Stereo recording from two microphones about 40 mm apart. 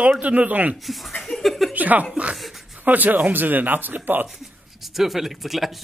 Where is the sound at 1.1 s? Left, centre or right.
Centre.